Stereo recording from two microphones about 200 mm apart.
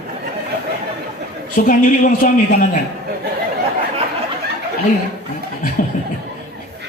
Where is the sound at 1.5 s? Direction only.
45° left (ahead or behind).